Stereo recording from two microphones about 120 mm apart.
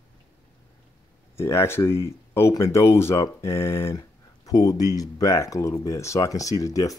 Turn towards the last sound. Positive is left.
turn(degrees=30)  # may be behind; listen again after turning